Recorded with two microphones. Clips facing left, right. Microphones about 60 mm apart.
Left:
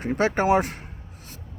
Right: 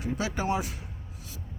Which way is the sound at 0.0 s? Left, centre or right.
Left.